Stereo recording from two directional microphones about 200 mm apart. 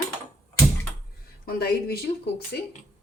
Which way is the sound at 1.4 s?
50° left (ahead or behind).